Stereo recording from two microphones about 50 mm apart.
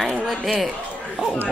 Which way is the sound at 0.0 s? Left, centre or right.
Centre.